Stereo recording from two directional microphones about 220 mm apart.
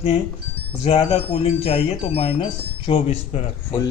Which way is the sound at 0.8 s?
25° left (ahead or behind).